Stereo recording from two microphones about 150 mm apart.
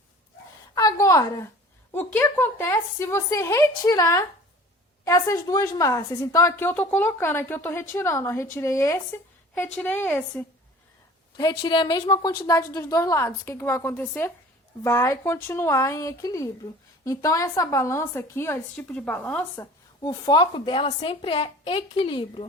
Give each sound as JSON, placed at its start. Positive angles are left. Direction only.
{"t": 0.8, "sound": "a sound", "side_deg": 25}
{"t": 1.9, "sound": "a woman's voice", "side_deg": 15}
{"t": 11.3, "sound": "a woman's voice", "side_deg": 30}
{"t": 20.0, "sound": "a woman's voice", "side_deg": 25}